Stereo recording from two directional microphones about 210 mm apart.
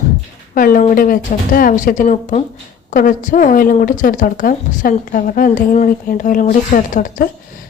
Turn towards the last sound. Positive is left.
turn(degrees=40)  # may be behind; listen again after turning